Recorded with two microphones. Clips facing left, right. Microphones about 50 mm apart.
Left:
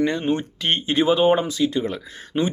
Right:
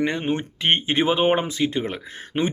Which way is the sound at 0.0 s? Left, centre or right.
Right.